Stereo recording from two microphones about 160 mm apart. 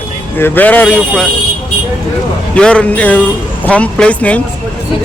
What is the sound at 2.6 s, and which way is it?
Speech, 5° left (ahead or behind).